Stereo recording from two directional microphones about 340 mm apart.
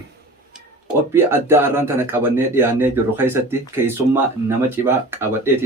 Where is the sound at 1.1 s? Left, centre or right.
Centre.